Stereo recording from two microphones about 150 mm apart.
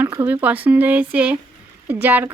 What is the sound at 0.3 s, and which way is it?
Speech, 10° right (ahead or behind).